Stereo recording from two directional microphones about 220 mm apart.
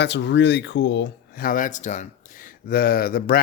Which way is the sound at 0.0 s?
50° left (ahead or behind).